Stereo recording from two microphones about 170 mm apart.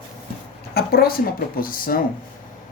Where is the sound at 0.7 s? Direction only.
65° left (ahead or behind).